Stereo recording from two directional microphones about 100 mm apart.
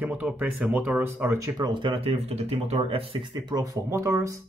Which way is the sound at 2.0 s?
90° right.